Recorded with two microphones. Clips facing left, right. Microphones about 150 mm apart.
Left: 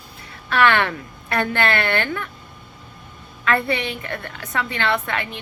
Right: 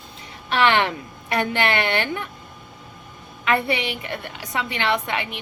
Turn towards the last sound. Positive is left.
turn(degrees=-15)  # may be behind; listen again after turning